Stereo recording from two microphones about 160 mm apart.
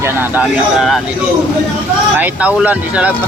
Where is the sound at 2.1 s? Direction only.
10° right (ahead or behind).